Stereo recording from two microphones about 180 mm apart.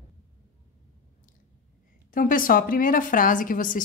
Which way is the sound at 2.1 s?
50° left (ahead or behind).